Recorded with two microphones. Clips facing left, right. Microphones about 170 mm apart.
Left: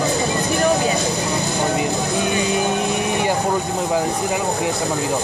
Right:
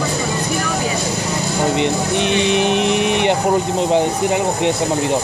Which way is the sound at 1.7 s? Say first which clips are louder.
Right 3 dB; 80° right.